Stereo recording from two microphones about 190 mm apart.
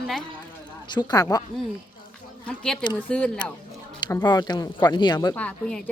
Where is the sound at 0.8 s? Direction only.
25° left (ahead or behind).